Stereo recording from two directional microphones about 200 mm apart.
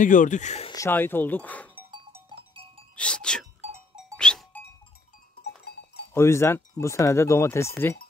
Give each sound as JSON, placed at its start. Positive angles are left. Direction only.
{"t": 0.0, "sound": "speech", "side_deg": 40}
{"t": 0.7, "sound": "speech", "side_deg": 10}
{"t": 3.0, "sound": "speech", "side_deg": 5}
{"t": 4.2, "sound": "goat", "side_deg": 5}
{"t": 5.7, "sound": "sheep", "side_deg": 50}
{"t": 6.1, "sound": "speech", "side_deg": 15}